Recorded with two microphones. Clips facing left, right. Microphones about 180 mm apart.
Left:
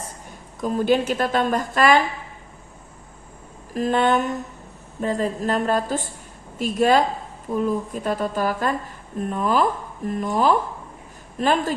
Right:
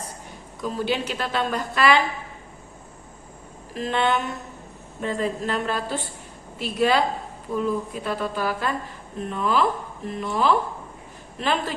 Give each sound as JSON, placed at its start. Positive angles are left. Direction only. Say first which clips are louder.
{"t": 0.6, "sound": "a woman's voice", "louder": "left 6 dB", "side_deg": 50}
{"t": 3.8, "sound": "a woman's voice", "louder": "left 4 dB", "side_deg": 45}